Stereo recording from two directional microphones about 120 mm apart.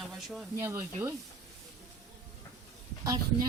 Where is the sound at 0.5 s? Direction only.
25° right (ahead or behind).